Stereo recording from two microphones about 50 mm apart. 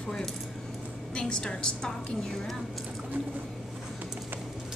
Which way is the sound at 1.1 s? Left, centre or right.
Centre.